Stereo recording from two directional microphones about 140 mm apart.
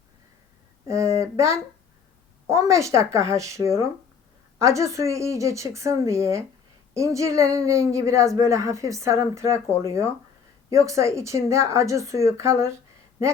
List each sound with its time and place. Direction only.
0.9 s a woman's voice: 20° right (ahead or behind)